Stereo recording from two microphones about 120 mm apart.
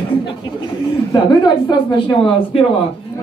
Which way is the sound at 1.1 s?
40° left (ahead or behind).